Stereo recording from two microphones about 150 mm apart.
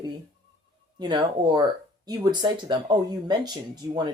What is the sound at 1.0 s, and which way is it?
Speech, 30° right (ahead or behind).